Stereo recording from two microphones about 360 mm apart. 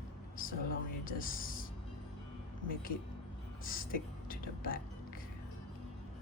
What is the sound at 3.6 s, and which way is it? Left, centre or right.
Speech, left.